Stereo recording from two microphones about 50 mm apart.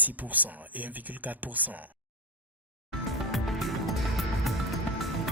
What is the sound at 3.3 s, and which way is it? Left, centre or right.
Music, centre.